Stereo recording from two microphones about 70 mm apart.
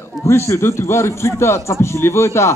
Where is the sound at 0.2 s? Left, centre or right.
Left.